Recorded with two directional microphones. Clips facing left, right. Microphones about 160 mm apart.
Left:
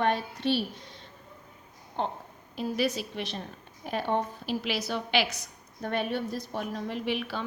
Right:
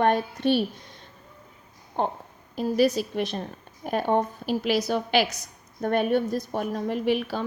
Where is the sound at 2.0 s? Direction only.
50° right (ahead or behind).